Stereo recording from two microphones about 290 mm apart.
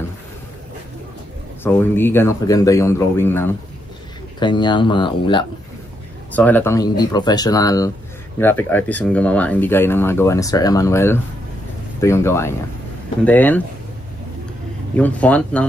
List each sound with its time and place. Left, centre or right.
1.6 s speech: centre
15.0 s speech: centre